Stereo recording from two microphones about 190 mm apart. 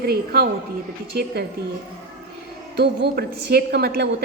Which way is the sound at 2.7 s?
60° right (ahead or behind).